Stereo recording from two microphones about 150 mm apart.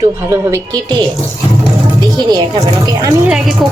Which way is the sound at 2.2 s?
25° right (ahead or behind).